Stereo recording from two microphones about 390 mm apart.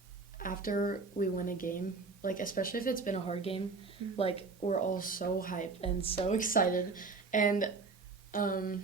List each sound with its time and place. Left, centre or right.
0.3 s a woman's voice: left